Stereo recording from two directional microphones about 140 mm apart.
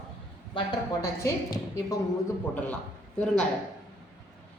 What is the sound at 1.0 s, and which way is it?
Speech, 25° left (ahead or behind).